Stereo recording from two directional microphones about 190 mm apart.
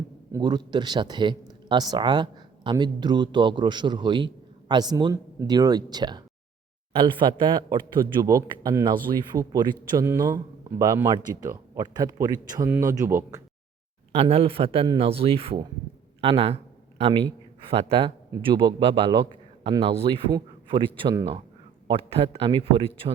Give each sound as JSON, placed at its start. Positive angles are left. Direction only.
{"t": 0.3, "sound": "speech", "side_deg": -20}
{"t": 14.1, "sound": "a man's voice", "side_deg": -35}